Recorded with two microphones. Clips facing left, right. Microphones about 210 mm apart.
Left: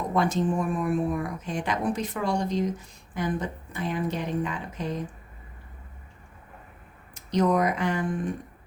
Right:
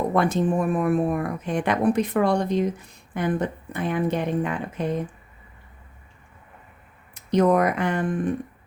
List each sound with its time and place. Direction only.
0.1 s speech: 60° right (ahead or behind)
7.1 s speech: 55° right (ahead or behind)